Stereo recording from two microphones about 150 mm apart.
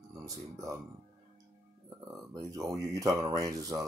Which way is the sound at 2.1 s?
20° right (ahead or behind).